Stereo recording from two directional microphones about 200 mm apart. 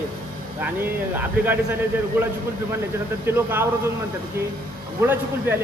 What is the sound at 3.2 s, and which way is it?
Speech, 10° right (ahead or behind).